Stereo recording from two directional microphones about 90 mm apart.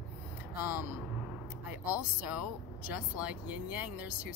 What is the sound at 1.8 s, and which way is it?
Speech, 15° right (ahead or behind).